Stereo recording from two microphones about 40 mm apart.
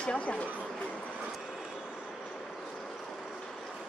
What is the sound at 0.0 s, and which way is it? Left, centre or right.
Speech, left.